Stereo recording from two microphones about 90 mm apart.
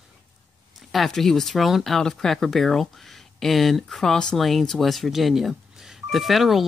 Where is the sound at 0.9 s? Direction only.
Centre (ahead or behind).